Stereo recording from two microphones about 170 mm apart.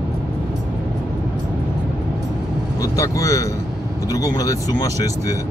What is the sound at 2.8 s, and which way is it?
Speech, 20° left (ahead or behind).